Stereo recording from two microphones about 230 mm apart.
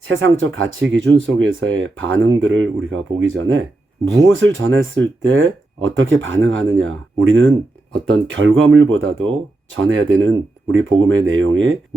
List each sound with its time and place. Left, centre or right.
0.0 s speech: right